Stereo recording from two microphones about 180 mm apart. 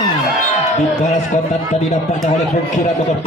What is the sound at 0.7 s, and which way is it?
Speech, 40° left (ahead or behind).